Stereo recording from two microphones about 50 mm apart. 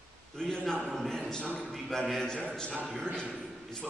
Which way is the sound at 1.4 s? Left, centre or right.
Right.